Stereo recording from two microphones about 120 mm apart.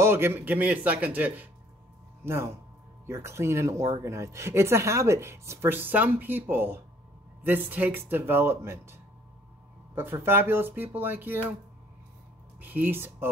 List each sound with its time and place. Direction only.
0.0 s speech: 20° right (ahead or behind)
12.5 s speech: 15° right (ahead or behind)